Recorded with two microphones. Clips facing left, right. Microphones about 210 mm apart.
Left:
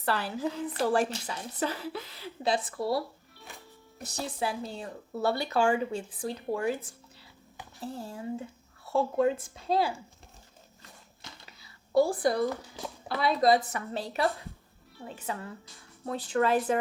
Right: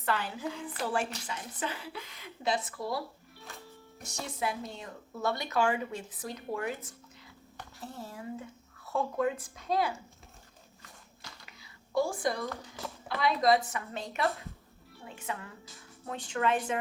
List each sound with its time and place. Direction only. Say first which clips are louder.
0.0 s a woman's voice: left 3 dB; 35° left (ahead or behind)
3.3 s music: even; centre (ahead or behind)
4.1 s a woman's voice: left 2 dB; 30° left (ahead or behind)
7.9 s speech: left 4 dB; 30° left (ahead or behind)
11.2 s a sound: left 2 dB; 35° left (ahead or behind)
13.1 s a woman's voice: left 2 dB; 30° left (ahead or behind)